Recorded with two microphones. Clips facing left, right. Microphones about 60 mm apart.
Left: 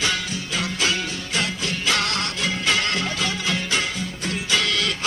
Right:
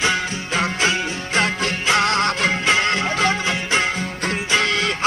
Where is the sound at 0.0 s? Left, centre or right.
Right.